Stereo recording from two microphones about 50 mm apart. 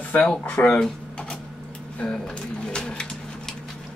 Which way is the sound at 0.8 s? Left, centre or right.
Centre.